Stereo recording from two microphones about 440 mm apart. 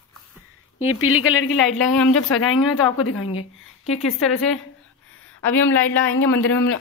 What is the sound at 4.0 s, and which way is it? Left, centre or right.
Speech, centre.